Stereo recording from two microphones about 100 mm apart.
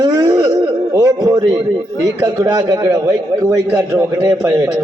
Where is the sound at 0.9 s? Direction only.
35° right (ahead or behind).